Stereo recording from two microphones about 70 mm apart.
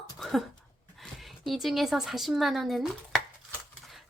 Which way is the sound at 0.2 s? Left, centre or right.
Centre.